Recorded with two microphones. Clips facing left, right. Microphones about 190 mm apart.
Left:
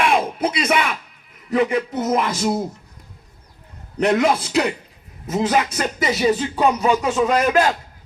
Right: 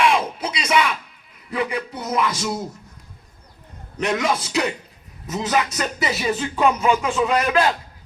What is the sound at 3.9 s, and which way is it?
A man's voice, 60° left (ahead or behind).